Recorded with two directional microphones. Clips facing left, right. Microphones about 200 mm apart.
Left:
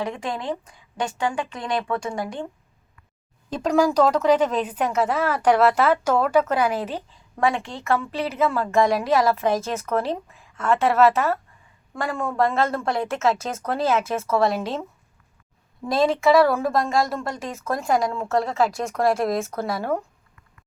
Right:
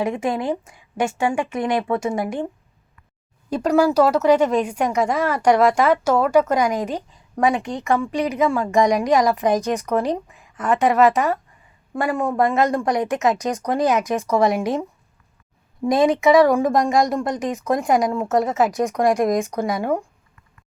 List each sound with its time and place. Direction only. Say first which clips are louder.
0.0 s a woman's voice: right 6 dB; 25° right (ahead or behind)
3.5 s speech: right 3 dB; 10° right (ahead or behind)
15.9 s speech: right 3 dB; 15° right (ahead or behind)